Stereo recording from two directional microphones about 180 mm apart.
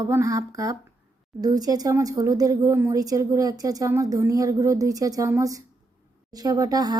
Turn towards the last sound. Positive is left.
turn(degrees=-20)  # may be behind; listen again after turning